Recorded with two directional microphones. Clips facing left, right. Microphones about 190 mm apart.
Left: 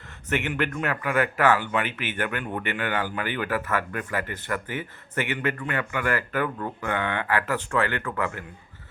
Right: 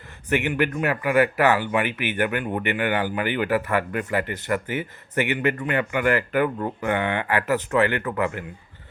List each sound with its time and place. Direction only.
0.3 s speech: 15° right (ahead or behind)